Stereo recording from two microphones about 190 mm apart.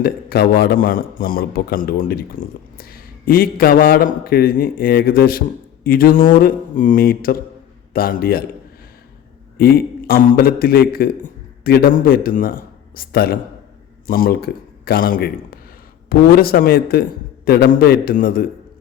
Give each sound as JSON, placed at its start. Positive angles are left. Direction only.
{"t": 0.0, "sound": "a man's voice", "side_deg": 50}
{"t": 9.6, "sound": "a man's voice", "side_deg": 55}